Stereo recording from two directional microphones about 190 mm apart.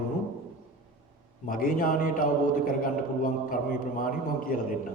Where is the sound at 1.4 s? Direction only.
45° left (ahead or behind).